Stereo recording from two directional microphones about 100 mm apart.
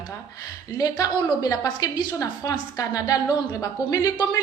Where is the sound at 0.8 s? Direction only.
40° left (ahead or behind).